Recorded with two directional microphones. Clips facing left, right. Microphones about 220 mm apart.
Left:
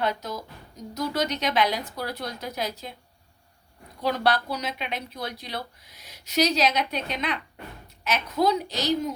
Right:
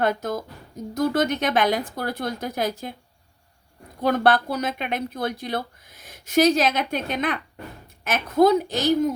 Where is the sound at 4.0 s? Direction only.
50° right (ahead or behind).